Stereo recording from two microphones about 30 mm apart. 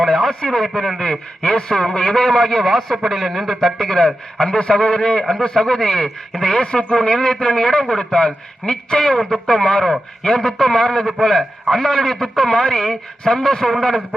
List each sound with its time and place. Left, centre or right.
0.1 s a man's voice: centre
2.0 s a man's voice: left
2.2 s a man's voice: centre
3.9 s a man's voice: left
4.4 s a man's voice: left